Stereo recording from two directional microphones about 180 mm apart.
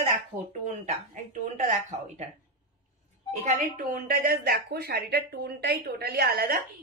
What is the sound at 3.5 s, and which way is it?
Speech, 50° right (ahead or behind).